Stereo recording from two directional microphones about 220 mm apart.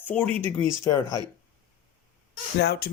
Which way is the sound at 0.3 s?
20° right (ahead or behind).